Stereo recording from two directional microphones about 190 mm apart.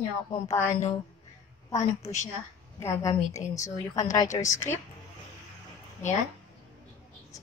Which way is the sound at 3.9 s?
40° left (ahead or behind).